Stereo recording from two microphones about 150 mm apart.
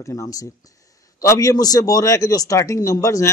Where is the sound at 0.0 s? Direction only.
20° left (ahead or behind).